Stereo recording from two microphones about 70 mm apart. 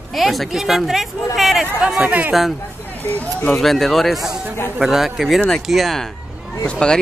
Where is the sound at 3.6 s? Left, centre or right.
Centre.